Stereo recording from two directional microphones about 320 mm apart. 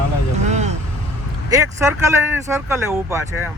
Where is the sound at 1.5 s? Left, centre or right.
Centre.